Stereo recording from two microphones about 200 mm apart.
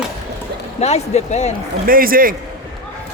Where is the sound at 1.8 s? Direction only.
45° right (ahead or behind).